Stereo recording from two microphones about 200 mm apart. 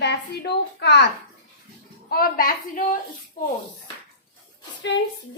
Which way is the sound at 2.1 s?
45° left (ahead or behind).